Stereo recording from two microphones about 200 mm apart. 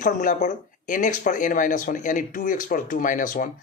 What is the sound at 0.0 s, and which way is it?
Speech, 40° left (ahead or behind).